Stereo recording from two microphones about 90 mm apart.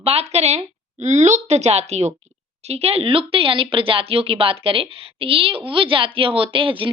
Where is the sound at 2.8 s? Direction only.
90° right.